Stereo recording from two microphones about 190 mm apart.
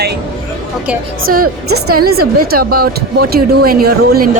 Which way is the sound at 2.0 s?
55° right (ahead or behind).